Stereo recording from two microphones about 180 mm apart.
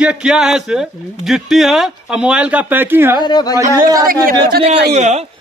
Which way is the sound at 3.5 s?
20° right (ahead or behind).